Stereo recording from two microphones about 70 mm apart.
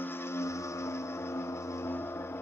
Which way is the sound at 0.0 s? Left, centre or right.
Left.